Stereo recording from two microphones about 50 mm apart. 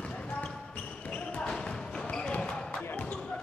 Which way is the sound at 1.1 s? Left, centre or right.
Left.